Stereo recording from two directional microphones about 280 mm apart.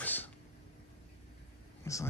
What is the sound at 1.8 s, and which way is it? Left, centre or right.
Speech, centre.